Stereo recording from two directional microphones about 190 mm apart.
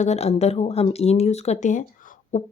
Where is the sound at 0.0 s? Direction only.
35° left (ahead or behind).